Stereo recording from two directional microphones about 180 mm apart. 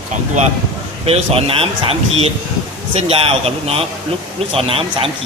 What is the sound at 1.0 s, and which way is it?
Speech, 35° right (ahead or behind).